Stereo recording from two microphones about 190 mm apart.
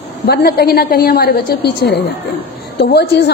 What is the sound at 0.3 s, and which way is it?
A woman's voice, 55° left (ahead or behind).